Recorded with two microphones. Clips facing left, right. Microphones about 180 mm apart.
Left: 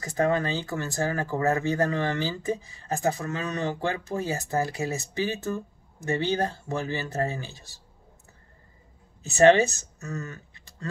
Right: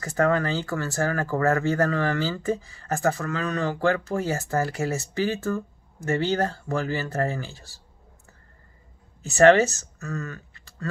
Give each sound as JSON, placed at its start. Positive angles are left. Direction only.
{"t": 0.0, "sound": "speech", "side_deg": 20}
{"t": 9.3, "sound": "speech", "side_deg": 20}